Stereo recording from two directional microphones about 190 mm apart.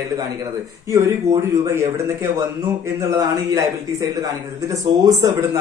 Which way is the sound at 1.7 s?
15° right (ahead or behind).